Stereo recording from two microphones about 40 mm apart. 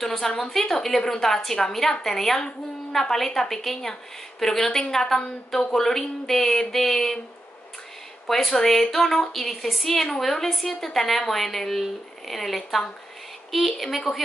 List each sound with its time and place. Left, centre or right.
0.0 s a woman's voice: centre
8.3 s a woman's voice: centre